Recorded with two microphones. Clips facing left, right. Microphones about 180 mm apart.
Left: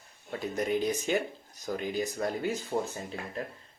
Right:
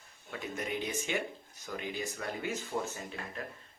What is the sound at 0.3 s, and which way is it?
Speech, 35° left (ahead or behind).